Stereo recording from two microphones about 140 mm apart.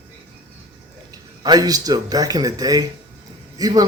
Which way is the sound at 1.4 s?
30° right (ahead or behind).